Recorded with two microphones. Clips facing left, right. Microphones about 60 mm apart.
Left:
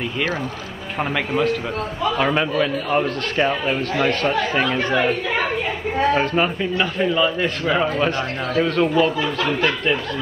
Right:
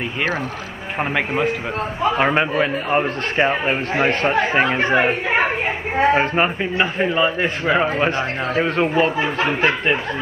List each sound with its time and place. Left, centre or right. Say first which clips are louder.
0.9 s speech: right 1 dB; right